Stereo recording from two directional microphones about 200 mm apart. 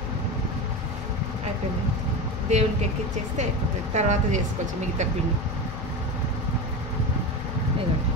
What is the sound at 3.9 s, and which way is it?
Speech, 35° right (ahead or behind).